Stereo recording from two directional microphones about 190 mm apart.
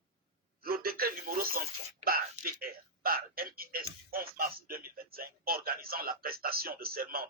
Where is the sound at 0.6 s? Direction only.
50° right (ahead or behind).